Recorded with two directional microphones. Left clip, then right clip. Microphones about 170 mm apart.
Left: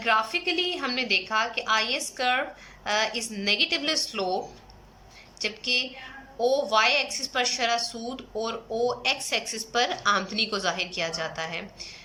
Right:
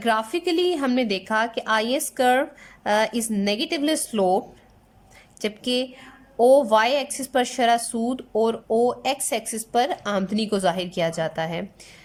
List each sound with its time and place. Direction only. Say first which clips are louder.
0.0 s a woman's voice: right 1 dB; 35° right (ahead or behind)
5.4 s a woman's voice: right 1 dB; 40° right (ahead or behind)